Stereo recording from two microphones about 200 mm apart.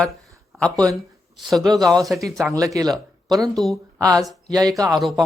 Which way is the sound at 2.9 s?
Centre (ahead or behind).